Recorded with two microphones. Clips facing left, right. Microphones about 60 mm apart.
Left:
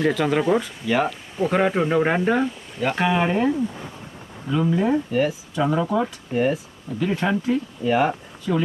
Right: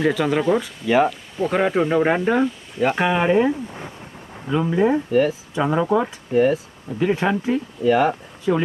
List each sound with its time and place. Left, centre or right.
0.0 s speech: centre
2.8 s speech: centre
6.3 s speech: centre
7.0 s speech: centre
7.9 s speech: centre
8.5 s speech: right